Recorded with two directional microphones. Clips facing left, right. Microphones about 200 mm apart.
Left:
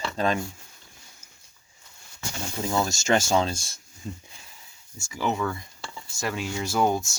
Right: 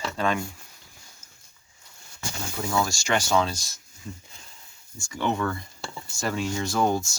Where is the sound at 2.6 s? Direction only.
20° left (ahead or behind).